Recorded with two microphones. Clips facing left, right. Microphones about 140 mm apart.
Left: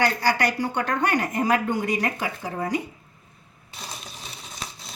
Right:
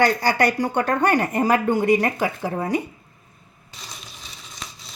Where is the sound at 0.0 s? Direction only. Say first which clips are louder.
Right 4 dB; 50° right (ahead or behind).